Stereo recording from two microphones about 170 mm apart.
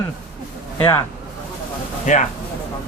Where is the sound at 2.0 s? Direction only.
45° left (ahead or behind).